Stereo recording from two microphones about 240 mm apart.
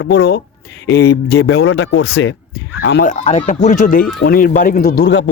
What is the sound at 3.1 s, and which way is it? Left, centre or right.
Speech, left.